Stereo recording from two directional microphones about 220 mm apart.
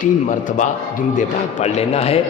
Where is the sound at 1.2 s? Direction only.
30° left (ahead or behind).